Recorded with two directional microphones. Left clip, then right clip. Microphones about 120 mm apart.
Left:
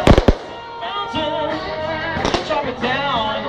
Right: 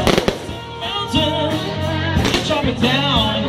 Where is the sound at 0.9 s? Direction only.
40° right (ahead or behind).